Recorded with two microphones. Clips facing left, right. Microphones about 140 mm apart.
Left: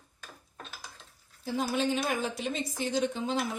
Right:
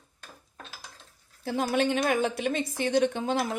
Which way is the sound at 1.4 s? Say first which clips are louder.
Right 3 dB; 60° right (ahead or behind).